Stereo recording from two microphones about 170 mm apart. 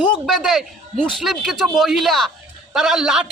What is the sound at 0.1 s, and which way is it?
A man's voice, centre (ahead or behind).